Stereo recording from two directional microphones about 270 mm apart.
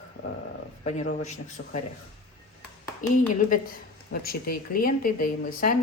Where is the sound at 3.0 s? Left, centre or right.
Left.